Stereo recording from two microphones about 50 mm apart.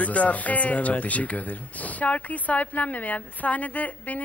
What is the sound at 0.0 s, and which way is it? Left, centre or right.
Speech, left.